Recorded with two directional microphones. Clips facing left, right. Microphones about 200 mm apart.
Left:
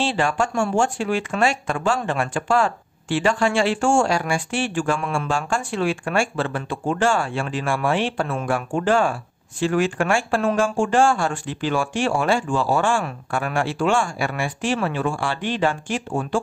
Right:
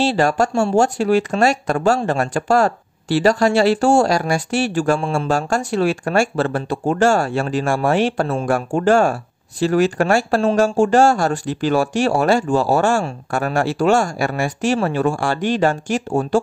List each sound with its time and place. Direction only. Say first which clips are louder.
0.0 s speech: right 5 dB; 40° right (ahead or behind)